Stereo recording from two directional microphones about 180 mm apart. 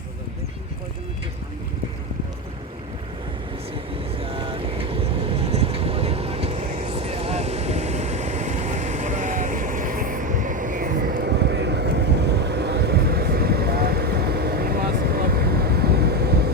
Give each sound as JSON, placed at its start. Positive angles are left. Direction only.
{"t": 4.2, "sound": "vehicle", "side_deg": -30}